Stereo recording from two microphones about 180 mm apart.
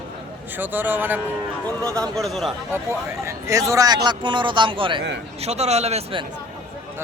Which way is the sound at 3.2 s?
15° right (ahead or behind).